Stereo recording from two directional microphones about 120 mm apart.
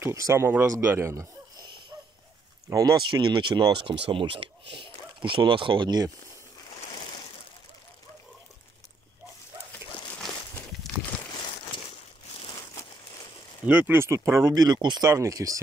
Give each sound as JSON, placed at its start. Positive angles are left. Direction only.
{"t": 0.0, "sound": "speech", "side_deg": -25}
{"t": 2.7, "sound": "speech", "side_deg": -25}
{"t": 3.2, "sound": "speech", "side_deg": -40}
{"t": 11.3, "sound": "a sound", "side_deg": 40}
{"t": 12.3, "sound": "crumpling", "side_deg": 50}
{"t": 12.5, "sound": "crumpling", "side_deg": 30}
{"t": 13.7, "sound": "speech", "side_deg": -15}